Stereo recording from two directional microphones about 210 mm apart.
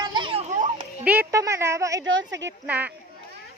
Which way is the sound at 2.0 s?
60° right (ahead or behind).